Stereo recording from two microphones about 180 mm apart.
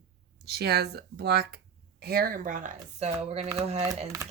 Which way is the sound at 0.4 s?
65° right (ahead or behind).